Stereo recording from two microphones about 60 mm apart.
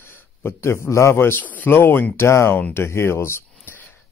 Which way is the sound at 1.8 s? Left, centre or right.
Left.